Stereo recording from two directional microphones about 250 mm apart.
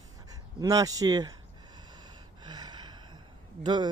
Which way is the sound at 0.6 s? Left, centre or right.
Centre.